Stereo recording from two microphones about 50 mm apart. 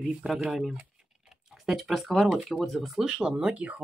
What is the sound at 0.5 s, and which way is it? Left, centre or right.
Speech, centre.